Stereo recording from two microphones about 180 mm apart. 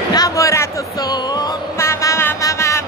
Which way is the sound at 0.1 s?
20° left (ahead or behind).